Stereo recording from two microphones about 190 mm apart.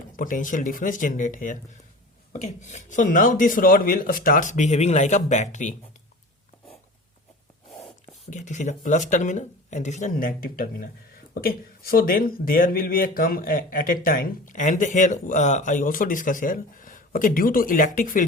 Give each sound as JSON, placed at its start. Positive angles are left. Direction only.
{"t": 0.2, "sound": "speech", "side_deg": 45}
{"t": 8.3, "sound": "speech", "side_deg": 40}